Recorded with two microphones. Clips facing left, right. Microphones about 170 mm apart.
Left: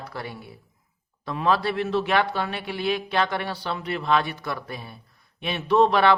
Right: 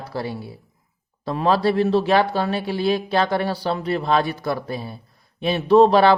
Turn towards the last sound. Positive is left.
turn(degrees=-35)  # may be behind; listen again after turning